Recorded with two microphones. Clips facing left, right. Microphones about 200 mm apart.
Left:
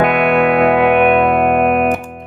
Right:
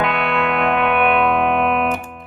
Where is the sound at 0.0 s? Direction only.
50° left (ahead or behind).